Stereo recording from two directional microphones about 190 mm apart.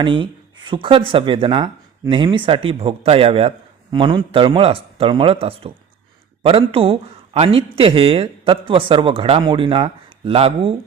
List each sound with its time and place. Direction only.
0.0 s speech: 25° right (ahead or behind)